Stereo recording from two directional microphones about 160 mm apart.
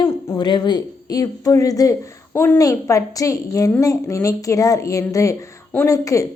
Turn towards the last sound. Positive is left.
turn(degrees=20)  # may be behind; listen again after turning